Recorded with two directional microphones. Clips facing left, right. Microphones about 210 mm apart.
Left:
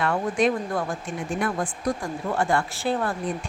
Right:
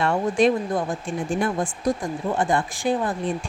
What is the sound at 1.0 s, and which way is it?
Speech, 30° right (ahead or behind).